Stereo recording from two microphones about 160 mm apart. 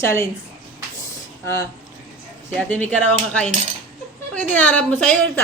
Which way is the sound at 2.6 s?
10° left (ahead or behind).